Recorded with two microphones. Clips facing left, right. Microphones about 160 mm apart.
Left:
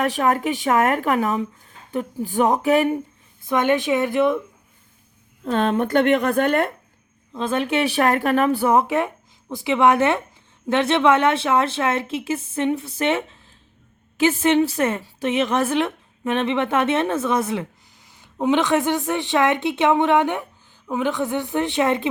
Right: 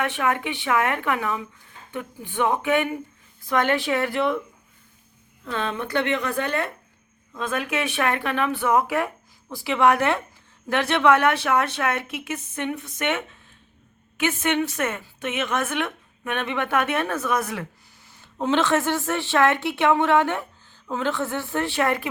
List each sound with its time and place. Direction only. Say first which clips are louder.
0.0 s speech: left 4 dB; 40° left (ahead or behind)
3.4 s a woman's voice: left 3 dB; 20° left (ahead or behind)
5.5 s a woman's voice: left 8 dB; 50° left (ahead or behind)
7.3 s a woman's voice: left 5 dB; 30° left (ahead or behind)
18.2 s speech: left 3 dB; 15° left (ahead or behind)